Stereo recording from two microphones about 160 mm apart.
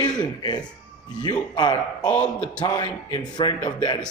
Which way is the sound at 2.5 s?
25° left (ahead or behind).